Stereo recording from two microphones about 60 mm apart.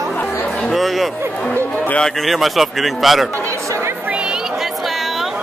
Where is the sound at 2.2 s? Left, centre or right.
Centre.